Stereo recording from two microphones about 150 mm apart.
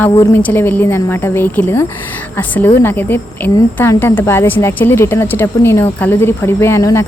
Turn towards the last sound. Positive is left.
turn(degrees=20)  # may be behind; listen again after turning